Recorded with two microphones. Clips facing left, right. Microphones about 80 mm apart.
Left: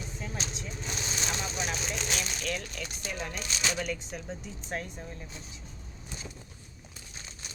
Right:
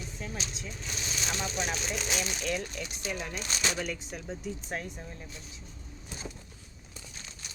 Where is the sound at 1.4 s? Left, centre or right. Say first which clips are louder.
Right 1 dB; centre.